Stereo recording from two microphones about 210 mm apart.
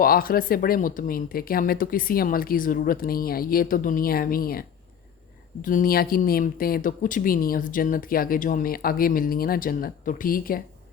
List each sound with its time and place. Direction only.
0.0 s speech: 45° left (ahead or behind)
5.6 s speech: 40° left (ahead or behind)